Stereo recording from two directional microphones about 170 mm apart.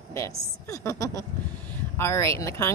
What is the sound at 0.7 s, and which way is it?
Speech, 20° left (ahead or behind).